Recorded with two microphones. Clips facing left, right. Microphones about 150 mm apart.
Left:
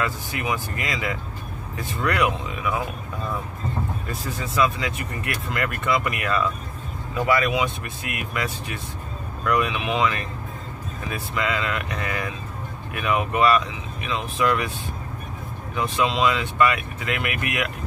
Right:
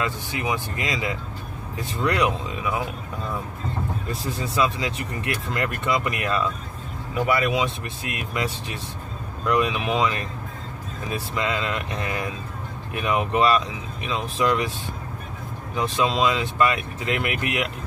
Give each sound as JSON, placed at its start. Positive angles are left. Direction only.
{"t": 0.0, "sound": "speech", "side_deg": -25}
{"t": 4.1, "sound": "speech", "side_deg": -30}
{"t": 7.4, "sound": "speech", "side_deg": -30}
{"t": 15.7, "sound": "speech", "side_deg": -35}